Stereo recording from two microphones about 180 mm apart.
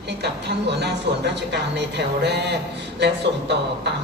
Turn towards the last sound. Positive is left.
turn(degrees=-70)  # may be behind; listen again after turning